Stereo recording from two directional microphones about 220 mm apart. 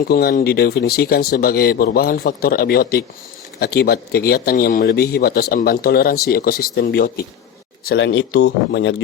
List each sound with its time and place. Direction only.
0.1 s speech: 40° left (ahead or behind)
7.9 s speech: 55° left (ahead or behind)